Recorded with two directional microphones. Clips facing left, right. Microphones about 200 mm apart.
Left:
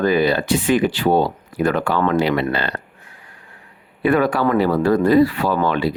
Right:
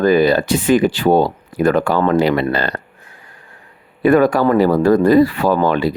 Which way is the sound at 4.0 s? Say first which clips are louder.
Right 5 dB; 45° right (ahead or behind).